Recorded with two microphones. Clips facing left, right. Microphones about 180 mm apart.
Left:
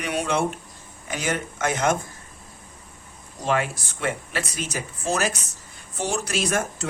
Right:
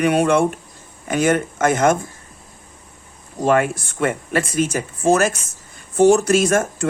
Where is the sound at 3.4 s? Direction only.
50° right (ahead or behind).